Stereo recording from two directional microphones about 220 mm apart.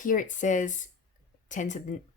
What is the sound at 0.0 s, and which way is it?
Speech, 35° left (ahead or behind).